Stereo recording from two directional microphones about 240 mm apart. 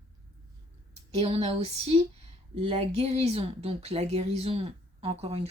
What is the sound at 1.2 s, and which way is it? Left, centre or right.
Speech, right.